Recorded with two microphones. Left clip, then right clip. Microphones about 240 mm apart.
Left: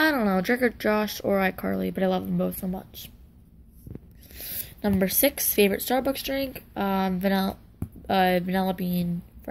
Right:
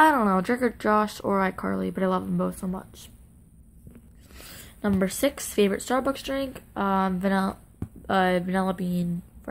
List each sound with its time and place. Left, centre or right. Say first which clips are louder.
0.0 s speech: right 4 dB; centre
4.4 s speech: left 1 dB; centre